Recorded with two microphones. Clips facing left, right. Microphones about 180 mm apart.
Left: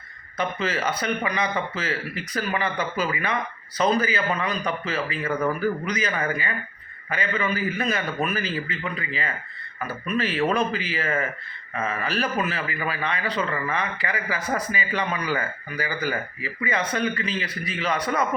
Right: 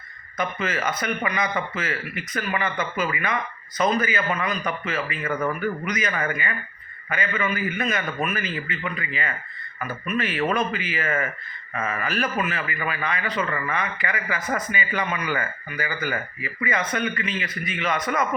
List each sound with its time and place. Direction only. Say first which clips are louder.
0.3 s a man's voice: left 1 dB; 30° left (ahead or behind)